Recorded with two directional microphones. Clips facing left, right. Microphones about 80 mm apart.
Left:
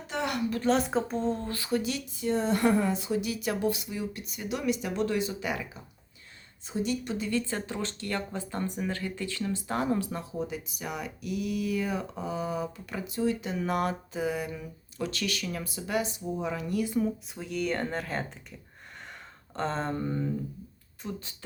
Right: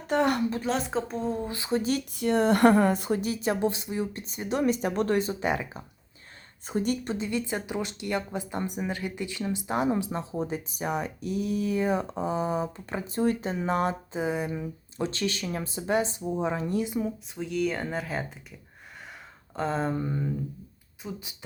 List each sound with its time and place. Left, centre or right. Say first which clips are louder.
0.1 s a sound: right 7 dB; right
0.6 s speech: left 2 dB; centre
1.5 s speech: right 1 dB; right
2.1 s a woman's voice: right 4 dB; right
6.7 s speech: right 3 dB; right
7.2 s speech: right 1 dB; centre
17.2 s speech: right 3 dB; centre
19.5 s speech: right 3 dB; centre